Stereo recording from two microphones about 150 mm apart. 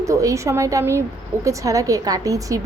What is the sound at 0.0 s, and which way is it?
A woman's voice, 20° right (ahead or behind).